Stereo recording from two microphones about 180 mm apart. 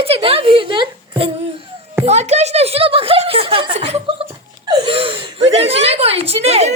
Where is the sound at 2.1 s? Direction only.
40° right (ahead or behind).